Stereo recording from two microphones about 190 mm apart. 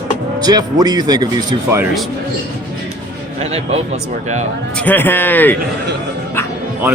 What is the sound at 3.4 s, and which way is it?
Speech, 30° right (ahead or behind).